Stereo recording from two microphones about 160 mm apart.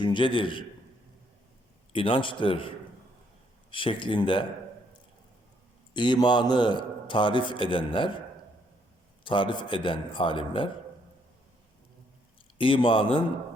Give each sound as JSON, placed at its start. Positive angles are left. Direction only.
{"t": 0.0, "sound": "a man's voice", "side_deg": 30}
{"t": 1.9, "sound": "a man's voice", "side_deg": 35}
{"t": 5.9, "sound": "a man's voice", "side_deg": 30}
{"t": 9.2, "sound": "a man's voice", "side_deg": 30}
{"t": 12.5, "sound": "a man's voice", "side_deg": 35}